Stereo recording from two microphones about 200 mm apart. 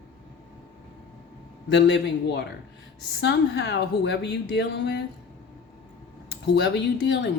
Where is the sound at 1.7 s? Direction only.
60° left (ahead or behind).